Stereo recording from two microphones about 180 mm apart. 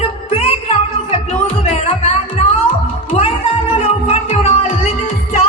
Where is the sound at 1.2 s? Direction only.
35° left (ahead or behind).